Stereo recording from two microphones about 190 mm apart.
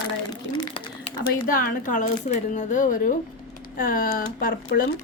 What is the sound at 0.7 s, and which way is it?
Typing, 30° left (ahead or behind).